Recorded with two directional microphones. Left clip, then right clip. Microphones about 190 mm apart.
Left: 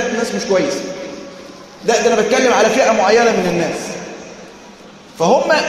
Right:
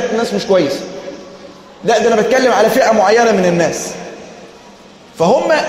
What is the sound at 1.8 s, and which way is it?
A man's voice, 50° right (ahead or behind).